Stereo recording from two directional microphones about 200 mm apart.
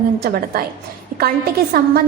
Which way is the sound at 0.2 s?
50° right (ahead or behind).